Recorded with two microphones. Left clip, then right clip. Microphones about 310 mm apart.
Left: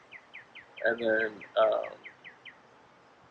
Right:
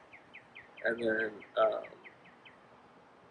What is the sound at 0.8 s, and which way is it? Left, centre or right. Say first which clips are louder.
Speech: left 5 dB; centre.